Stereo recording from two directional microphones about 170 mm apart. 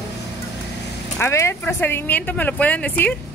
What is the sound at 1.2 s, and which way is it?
Speech, 15° left (ahead or behind).